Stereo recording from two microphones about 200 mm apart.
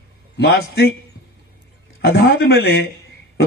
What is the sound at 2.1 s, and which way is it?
Speech, 55° left (ahead or behind).